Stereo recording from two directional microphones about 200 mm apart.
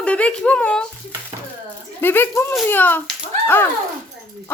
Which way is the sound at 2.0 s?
10° left (ahead or behind).